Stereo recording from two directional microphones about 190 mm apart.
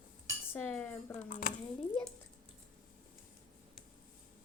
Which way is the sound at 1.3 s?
45° left (ahead or behind).